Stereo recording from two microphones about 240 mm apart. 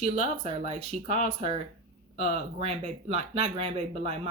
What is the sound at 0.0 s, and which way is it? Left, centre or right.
Speech, right.